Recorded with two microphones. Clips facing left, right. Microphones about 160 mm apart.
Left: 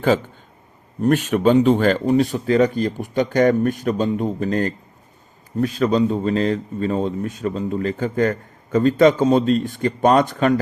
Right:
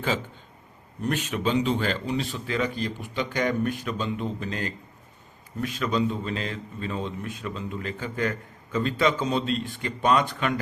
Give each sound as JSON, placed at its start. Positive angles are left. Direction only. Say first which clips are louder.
{"t": 1.0, "sound": "a man's voice", "louder": "left 11 dB", "side_deg": 50}